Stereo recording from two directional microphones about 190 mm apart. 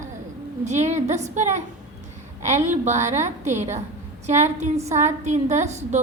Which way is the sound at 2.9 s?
40° right (ahead or behind).